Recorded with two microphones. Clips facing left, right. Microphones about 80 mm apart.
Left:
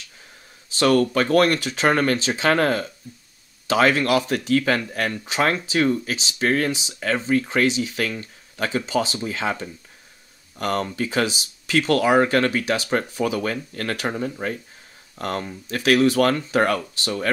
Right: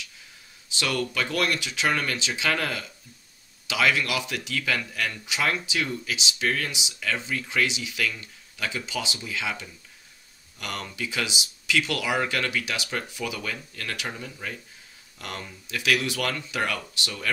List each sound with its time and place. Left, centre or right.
0.7 s speech: left